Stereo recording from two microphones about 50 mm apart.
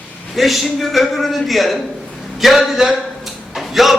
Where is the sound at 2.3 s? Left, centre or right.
Centre.